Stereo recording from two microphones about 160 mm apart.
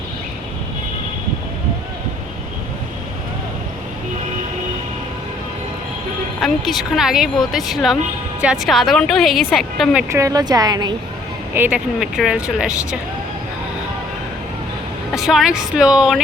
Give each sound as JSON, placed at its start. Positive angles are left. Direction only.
{"t": 6.4, "sound": "speech", "side_deg": 0}
{"t": 10.1, "sound": "a woman's voice", "side_deg": -20}
{"t": 11.5, "sound": "speech", "side_deg": -10}
{"t": 15.1, "sound": "speech", "side_deg": 0}